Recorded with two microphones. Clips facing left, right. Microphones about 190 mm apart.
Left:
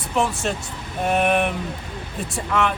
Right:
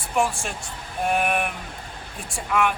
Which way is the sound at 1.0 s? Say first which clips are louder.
Left 4 dB; 5° right (ahead or behind).